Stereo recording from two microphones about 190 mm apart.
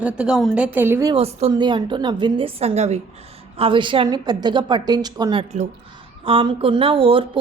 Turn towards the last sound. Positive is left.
turn(degrees=-30)  # may be behind; listen again after turning